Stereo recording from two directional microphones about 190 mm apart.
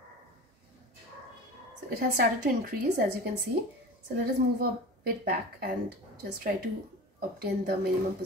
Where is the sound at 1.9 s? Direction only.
50° right (ahead or behind).